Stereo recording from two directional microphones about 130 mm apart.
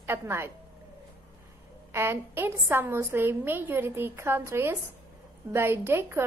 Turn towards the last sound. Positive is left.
turn(degrees=-20)  # may be behind; listen again after turning